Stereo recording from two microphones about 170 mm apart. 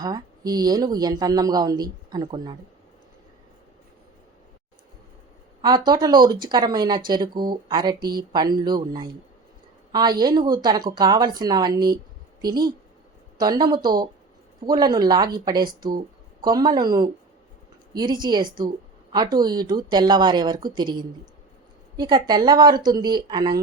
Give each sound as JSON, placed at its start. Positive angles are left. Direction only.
{"t": 0.0, "sound": "speech", "side_deg": -20}
{"t": 5.6, "sound": "speech", "side_deg": -25}